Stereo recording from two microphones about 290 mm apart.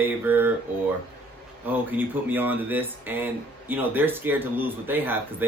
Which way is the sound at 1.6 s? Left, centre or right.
Centre.